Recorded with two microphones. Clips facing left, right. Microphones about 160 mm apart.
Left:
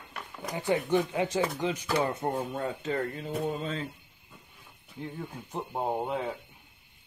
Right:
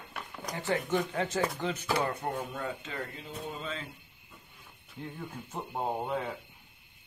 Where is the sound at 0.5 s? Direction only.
15° left (ahead or behind).